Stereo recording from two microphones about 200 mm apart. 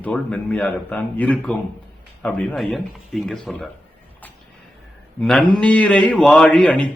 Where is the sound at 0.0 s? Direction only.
5° left (ahead or behind).